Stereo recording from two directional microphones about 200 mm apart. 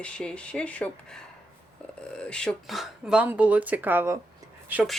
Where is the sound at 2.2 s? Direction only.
5° left (ahead or behind).